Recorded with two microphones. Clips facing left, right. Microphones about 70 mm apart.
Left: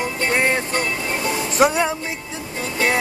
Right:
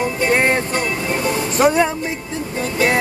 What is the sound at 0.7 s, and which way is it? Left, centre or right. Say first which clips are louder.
Speech: right 2 dB; centre.